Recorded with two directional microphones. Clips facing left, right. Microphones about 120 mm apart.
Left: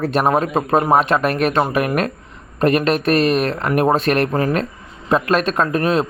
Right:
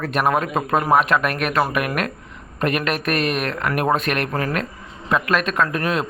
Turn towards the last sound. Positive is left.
turn(degrees=30)  # may be behind; listen again after turning